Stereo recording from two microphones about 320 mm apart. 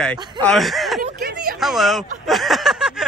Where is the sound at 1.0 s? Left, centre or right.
Right.